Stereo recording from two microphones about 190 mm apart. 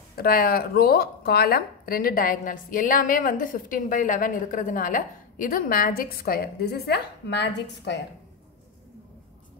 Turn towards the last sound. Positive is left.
turn(degrees=65)  # may be behind; listen again after turning